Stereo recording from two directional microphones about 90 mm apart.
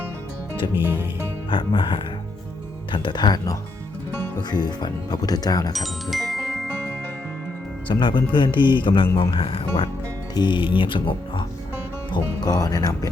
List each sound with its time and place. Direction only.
0.8 s music: 25° right (ahead or behind)
1.5 s speech: 70° left (ahead or behind); by 5.7 s 45° left (ahead or behind)
5.7 s glockenspiel: centre (ahead or behind)
7.9 s speech: 60° left (ahead or behind)
9.3 s speech: 80° left
10.3 s speech: 60° left (ahead or behind)
12.1 s speech: 45° left (ahead or behind)